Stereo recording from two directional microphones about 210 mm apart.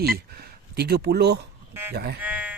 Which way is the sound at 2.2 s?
5° right (ahead or behind).